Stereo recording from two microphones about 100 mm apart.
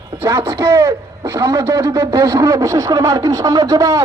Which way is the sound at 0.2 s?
30° right (ahead or behind).